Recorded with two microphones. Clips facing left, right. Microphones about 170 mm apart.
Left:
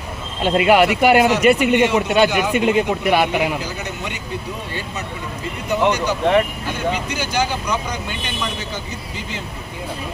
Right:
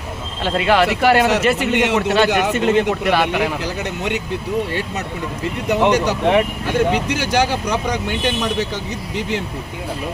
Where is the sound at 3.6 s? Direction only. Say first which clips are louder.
Right 5 dB; 70° right (ahead or behind).